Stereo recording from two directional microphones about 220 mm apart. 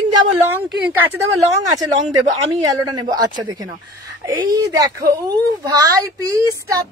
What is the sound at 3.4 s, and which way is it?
Speech, 15° right (ahead or behind).